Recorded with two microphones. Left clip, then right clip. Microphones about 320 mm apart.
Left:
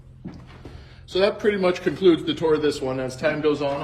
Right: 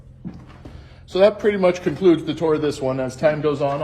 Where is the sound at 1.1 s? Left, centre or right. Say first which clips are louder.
Right 5 dB; right.